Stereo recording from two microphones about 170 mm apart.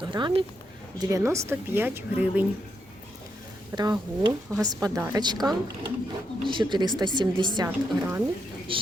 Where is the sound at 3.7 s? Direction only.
25° right (ahead or behind).